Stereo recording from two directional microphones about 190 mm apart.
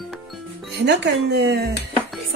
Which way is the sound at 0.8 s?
65° right (ahead or behind).